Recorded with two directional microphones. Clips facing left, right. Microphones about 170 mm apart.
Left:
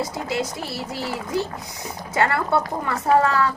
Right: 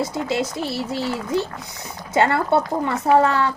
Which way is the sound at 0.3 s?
25° right (ahead or behind).